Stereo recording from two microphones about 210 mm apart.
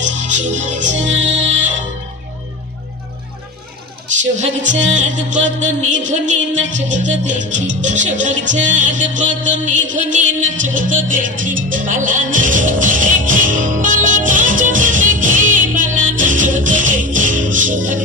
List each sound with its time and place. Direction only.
0.0 s music: 35° right (ahead or behind)
4.2 s music: 35° right (ahead or behind)